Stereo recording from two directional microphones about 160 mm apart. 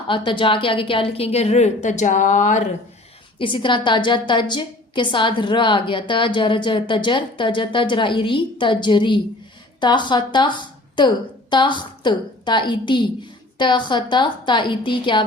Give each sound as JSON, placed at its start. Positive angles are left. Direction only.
{"t": 0.1, "sound": "a woman's voice", "side_deg": 30}
{"t": 3.3, "sound": "a woman's voice", "side_deg": 30}